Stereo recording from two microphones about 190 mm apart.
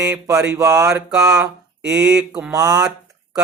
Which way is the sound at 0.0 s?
5° right (ahead or behind).